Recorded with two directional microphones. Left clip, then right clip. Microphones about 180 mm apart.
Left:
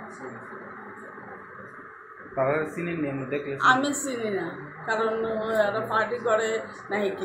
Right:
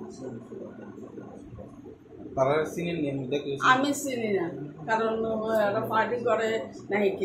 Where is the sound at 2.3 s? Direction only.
Centre (ahead or behind).